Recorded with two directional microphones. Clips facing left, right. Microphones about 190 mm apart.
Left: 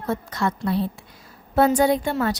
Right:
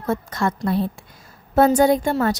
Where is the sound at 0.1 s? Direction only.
50° right (ahead or behind).